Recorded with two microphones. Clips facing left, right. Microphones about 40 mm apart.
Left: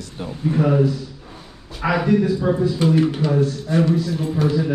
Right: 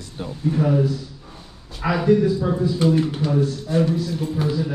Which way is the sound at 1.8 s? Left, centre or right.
Left.